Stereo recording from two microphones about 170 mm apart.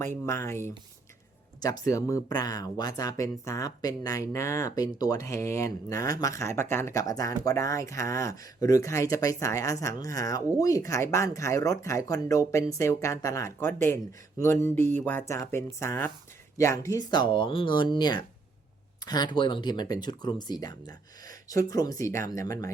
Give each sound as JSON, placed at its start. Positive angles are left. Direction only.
{"t": 0.0, "sound": "speech", "side_deg": 15}